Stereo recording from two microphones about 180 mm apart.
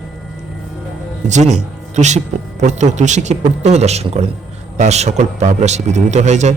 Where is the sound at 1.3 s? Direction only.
40° right (ahead or behind).